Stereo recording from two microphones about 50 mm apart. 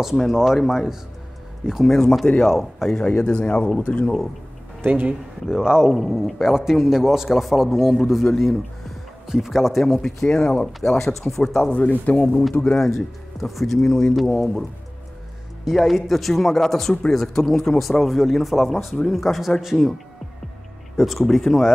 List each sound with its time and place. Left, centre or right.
0.0 s speech: centre
3.3 s speech: left
4.8 s speech: right
5.5 s a man's voice: centre
5.9 s speech: centre
6.5 s a man's voice: centre
10.0 s speech: centre
11.7 s speech: left
12.7 s speech: centre
15.6 s speech: centre
20.9 s speech: centre